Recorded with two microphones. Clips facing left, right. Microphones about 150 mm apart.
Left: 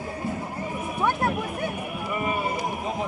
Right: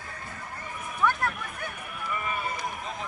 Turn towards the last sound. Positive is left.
turn(degrees=15)  # may be behind; listen again after turning